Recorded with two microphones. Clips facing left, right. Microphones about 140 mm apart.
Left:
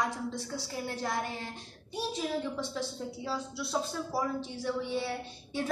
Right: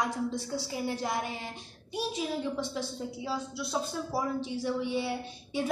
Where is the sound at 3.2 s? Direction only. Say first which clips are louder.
Right 1 dB; 5° right (ahead or behind).